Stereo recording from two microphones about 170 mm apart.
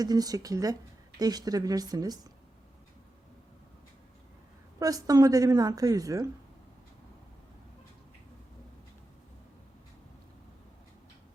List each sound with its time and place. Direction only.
0.0 s a woman's voice: 20° right (ahead or behind)
4.8 s a woman's voice: 20° right (ahead or behind)